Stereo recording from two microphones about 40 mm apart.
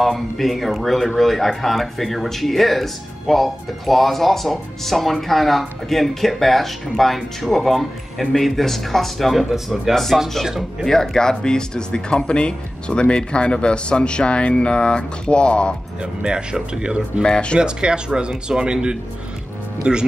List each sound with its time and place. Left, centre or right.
0.0 s speech: centre
10.9 s speech: centre
16.0 s speech: right
17.2 s speech: left
17.6 s speech: right